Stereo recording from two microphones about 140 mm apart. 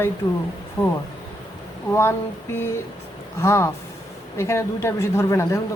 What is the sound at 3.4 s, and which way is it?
Speech, 20° left (ahead or behind).